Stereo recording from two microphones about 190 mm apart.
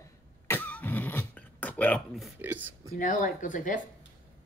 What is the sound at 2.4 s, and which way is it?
Speech, 10° right (ahead or behind).